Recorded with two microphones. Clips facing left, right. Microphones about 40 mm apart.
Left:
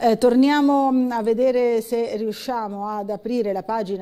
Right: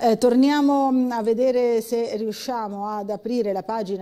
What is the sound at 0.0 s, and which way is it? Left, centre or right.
Speech, centre.